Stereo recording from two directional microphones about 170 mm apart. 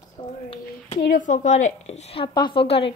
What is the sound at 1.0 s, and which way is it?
A woman's voice, 55° left (ahead or behind).